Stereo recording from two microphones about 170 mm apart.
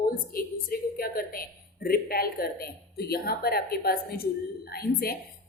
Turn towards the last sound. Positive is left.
turn(degrees=65)  # may be behind; listen again after turning